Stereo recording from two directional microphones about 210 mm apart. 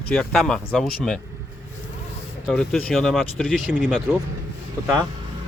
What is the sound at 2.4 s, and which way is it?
Speech, 5° left (ahead or behind).